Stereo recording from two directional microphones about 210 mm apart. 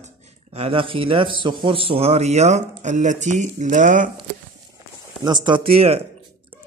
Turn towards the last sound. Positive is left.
turn(degrees=-30)  # may be behind; listen again after turning